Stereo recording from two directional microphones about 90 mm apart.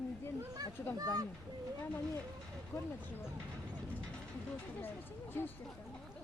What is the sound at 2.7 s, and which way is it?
Speech, 35° left (ahead or behind).